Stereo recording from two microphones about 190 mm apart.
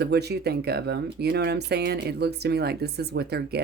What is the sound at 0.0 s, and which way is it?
Speech, 60° right (ahead or behind).